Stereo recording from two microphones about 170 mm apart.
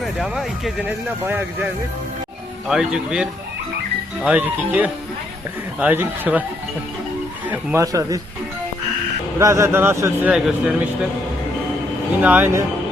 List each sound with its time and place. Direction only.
0.0 s a man's voice: centre (ahead or behind)
7.5 s a man's voice: 15° right (ahead or behind)
9.4 s a man's voice: 15° right (ahead or behind)
12.2 s a man's voice: 10° right (ahead or behind)